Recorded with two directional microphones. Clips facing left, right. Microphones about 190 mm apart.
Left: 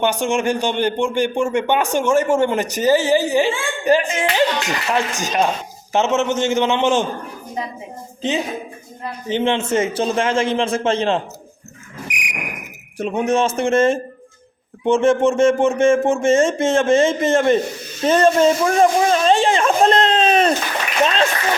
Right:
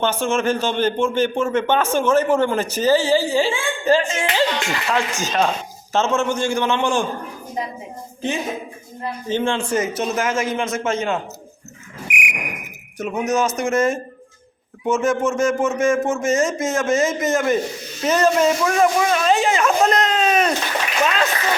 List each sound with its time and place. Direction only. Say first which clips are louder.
0.0 s a man's voice: left 1 dB; 15° left (ahead or behind)
9.3 s a man's voice: left 2 dB; 20° left (ahead or behind)
12.1 s cricket: right 3 dB; 35° left (ahead or behind)
13.0 s a man's voice: left 2 dB; 30° left (ahead or behind)
21.0 s splash: left 3 dB; 25° left (ahead or behind)